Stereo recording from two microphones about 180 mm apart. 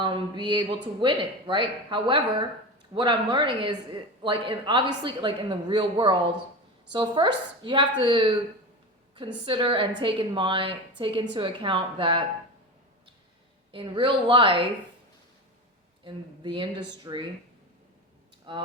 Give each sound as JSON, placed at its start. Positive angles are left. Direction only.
{"t": 0.0, "sound": "a woman's voice", "side_deg": -25}
{"t": 9.5, "sound": "a woman's voice", "side_deg": -30}
{"t": 13.7, "sound": "a woman's voice", "side_deg": -30}
{"t": 16.0, "sound": "a woman's voice", "side_deg": -25}
{"t": 18.5, "sound": "speech", "side_deg": -25}